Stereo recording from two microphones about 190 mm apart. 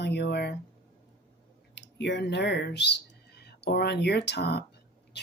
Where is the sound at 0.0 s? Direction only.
65° left (ahead or behind).